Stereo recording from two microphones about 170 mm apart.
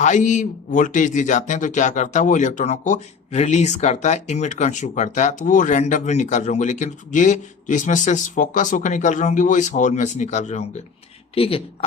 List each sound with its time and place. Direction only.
0.0 s speech: 45° left (ahead or behind)